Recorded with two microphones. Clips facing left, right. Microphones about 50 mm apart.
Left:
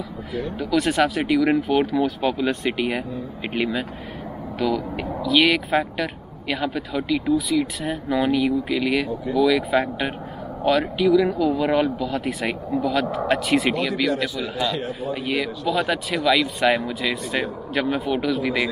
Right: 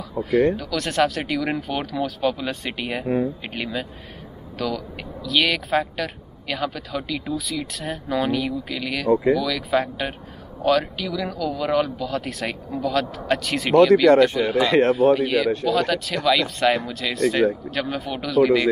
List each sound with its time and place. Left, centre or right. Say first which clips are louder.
0.3 s speech: right 11 dB; right
0.6 s speech: left 2 dB; centre
9.1 s speech: right 7 dB; right
9.4 s speech: left 7 dB; centre
9.7 s speech: left 1 dB; centre
10.8 s speech: left 9 dB; centre
14.1 s a man's voice: right 9 dB; right
14.7 s a man's voice: right 11 dB; right
15.1 s speech: right 5 dB; centre
17.7 s speech: left 4 dB; centre